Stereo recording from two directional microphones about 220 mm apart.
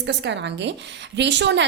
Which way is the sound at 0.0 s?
55° right (ahead or behind).